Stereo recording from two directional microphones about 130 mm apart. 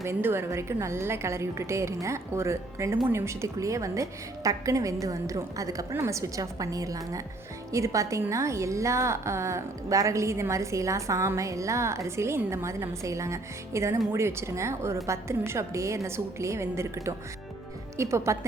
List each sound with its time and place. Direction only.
0.0 s a woman's voice: 20° right (ahead or behind)